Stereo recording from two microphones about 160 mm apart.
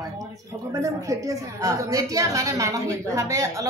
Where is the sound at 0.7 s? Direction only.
20° right (ahead or behind).